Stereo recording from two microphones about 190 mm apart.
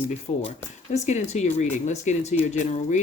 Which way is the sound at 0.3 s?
35° left (ahead or behind).